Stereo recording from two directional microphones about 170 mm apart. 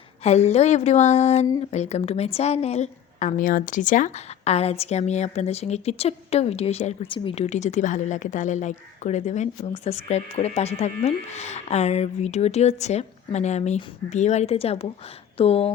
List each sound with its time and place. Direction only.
0.2 s speech: 40° left (ahead or behind)